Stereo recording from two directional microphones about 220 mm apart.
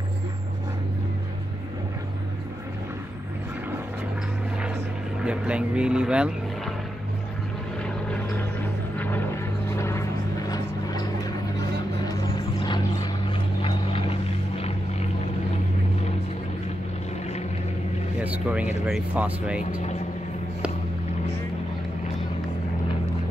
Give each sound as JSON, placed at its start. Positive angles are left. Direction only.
{"t": 5.2, "sound": "speech", "side_deg": -5}
{"t": 7.8, "sound": "vehicle", "side_deg": 5}
{"t": 18.2, "sound": "a sound", "side_deg": -5}
{"t": 18.9, "sound": "speech", "side_deg": -5}